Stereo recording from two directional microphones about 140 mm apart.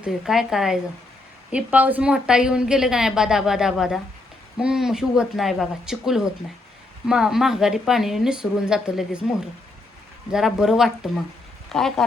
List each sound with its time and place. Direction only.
0.0 s a woman's voice: 5° right (ahead or behind)
10.3 s a woman's voice: 5° right (ahead or behind)